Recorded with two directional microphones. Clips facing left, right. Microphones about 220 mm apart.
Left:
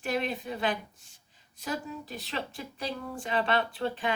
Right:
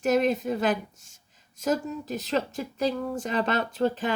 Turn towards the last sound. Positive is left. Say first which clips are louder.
# right 6 dB
turn(degrees=-40)  # may be behind; listen again after turning